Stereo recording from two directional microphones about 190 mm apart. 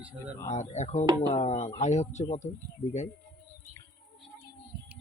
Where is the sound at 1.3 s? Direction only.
35° left (ahead or behind).